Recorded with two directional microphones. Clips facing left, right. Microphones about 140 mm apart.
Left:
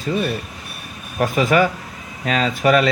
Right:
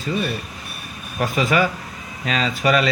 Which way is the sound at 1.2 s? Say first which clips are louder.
Left 3 dB; 50° left (ahead or behind).